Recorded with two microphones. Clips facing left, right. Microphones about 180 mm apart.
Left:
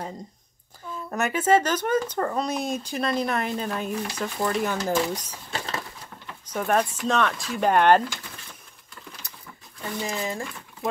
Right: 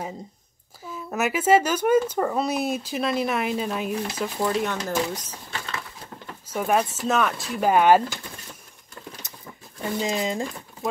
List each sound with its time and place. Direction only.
0.9 s speech: 5° right (ahead or behind)
4.6 s speech: 10° left (ahead or behind)
5.5 s a sound: 35° left (ahead or behind)
6.4 s speech: 5° right (ahead or behind)
9.8 s speech: 20° right (ahead or behind)